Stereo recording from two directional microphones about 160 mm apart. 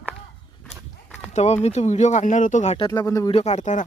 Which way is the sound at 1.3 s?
45° left (ahead or behind).